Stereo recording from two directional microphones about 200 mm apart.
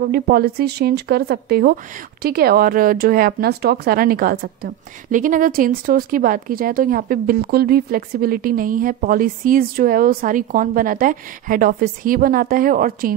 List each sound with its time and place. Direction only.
0.1 s speech: 50° right (ahead or behind)